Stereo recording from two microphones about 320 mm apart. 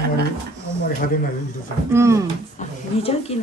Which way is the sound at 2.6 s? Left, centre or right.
Left.